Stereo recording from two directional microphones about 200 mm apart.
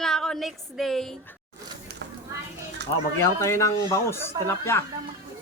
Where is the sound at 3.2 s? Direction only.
15° left (ahead or behind).